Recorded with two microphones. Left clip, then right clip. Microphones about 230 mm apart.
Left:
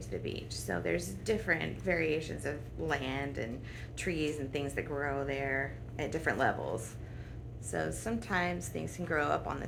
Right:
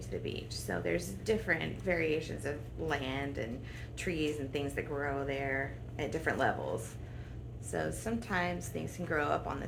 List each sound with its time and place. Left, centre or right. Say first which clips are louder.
0.1 s a woman's voice: even; left